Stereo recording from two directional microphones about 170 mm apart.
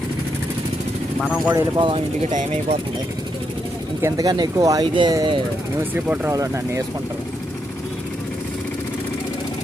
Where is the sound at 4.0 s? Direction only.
20° right (ahead or behind).